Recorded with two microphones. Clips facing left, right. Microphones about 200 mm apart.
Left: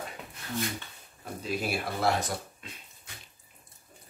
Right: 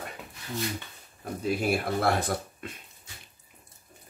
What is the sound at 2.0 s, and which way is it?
Speech, 55° right (ahead or behind).